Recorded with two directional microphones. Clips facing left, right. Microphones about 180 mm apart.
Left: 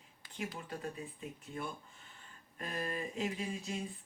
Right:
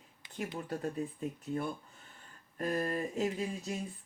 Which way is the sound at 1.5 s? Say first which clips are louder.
Right 6 dB; 35° right (ahead or behind).